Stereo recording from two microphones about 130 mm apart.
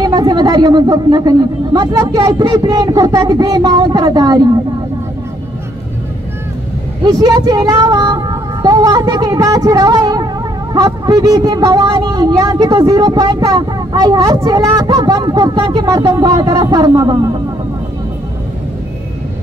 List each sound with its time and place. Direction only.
0.0 s speech: 30° right (ahead or behind)
7.1 s speech: 30° right (ahead or behind)